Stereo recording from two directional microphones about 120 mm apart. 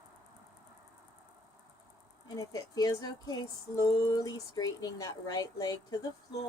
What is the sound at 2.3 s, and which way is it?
Speech, 30° left (ahead or behind).